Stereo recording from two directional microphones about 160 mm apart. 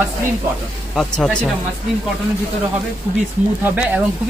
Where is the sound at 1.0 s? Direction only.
5° left (ahead or behind).